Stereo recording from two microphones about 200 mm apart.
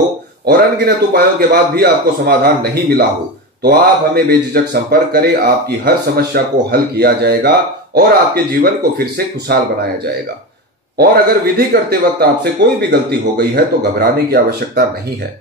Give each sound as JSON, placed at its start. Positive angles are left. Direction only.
{"t": 0.5, "sound": "speech", "side_deg": -50}
{"t": 11.0, "sound": "speech", "side_deg": -50}